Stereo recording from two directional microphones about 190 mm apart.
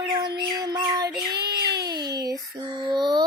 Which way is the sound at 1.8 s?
20° right (ahead or behind).